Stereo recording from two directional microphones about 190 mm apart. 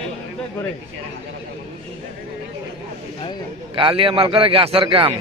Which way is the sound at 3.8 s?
25° right (ahead or behind).